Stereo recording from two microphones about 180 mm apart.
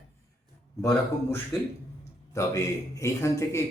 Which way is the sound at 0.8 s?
15° left (ahead or behind).